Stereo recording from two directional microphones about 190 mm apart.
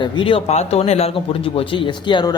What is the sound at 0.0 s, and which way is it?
Speech, 25° left (ahead or behind).